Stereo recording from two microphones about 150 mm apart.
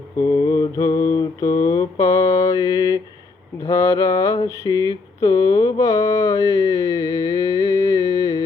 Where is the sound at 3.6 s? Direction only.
20° left (ahead or behind).